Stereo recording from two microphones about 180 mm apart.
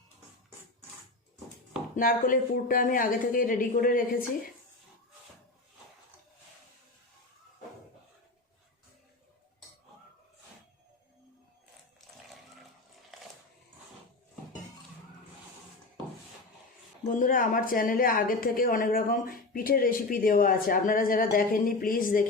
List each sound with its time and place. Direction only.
2.0 s a woman's voice: 50° left (ahead or behind)
17.1 s a woman's voice: 50° left (ahead or behind)